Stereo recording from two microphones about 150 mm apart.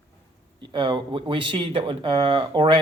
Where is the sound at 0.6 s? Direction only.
30° right (ahead or behind).